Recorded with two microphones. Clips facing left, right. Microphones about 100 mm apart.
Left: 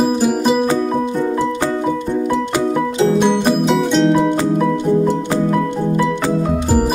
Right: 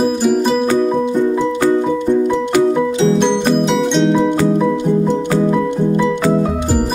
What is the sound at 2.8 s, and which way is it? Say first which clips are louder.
Music: right 1 dB; 5° left (ahead or behind).